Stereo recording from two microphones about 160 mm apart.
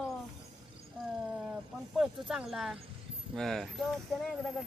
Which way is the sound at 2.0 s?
5° right (ahead or behind).